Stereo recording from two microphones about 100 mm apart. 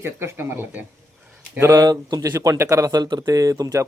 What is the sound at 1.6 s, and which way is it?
Speech, 35° right (ahead or behind).